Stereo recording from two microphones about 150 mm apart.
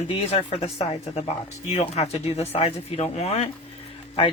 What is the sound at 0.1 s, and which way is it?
Speech, 40° left (ahead or behind).